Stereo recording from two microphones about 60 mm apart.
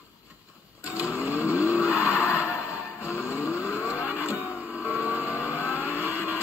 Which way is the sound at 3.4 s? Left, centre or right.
Right.